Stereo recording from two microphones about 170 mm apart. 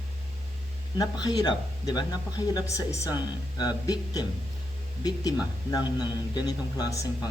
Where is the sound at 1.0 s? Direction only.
25° left (ahead or behind).